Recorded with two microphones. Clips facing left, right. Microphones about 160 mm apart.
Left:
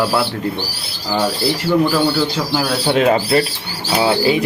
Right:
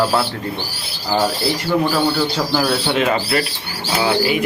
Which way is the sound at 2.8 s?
30° left (ahead or behind).